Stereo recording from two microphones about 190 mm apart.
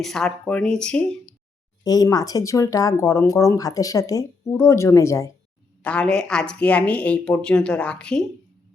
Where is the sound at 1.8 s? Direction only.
20° left (ahead or behind).